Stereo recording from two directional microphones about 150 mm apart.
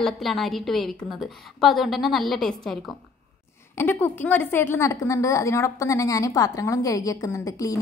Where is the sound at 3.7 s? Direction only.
15° left (ahead or behind).